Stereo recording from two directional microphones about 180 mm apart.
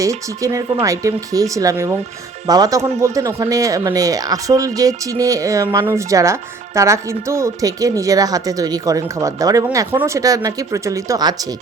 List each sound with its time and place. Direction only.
0.0 s speech: 20° right (ahead or behind)